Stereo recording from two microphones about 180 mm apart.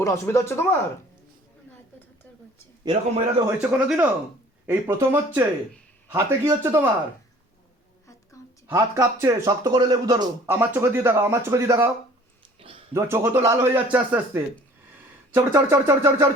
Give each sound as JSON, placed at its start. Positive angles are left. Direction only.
{"t": 0.0, "sound": "speech", "side_deg": 15}
{"t": 2.8, "sound": "a man's voice", "side_deg": -30}
{"t": 3.7, "sound": "speech", "side_deg": -5}
{"t": 8.6, "sound": "speech", "side_deg": -15}
{"t": 12.9, "sound": "speech", "side_deg": -15}